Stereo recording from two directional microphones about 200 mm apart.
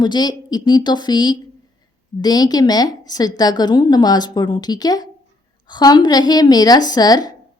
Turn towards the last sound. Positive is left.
turn(degrees=20)  # may be behind; listen again after turning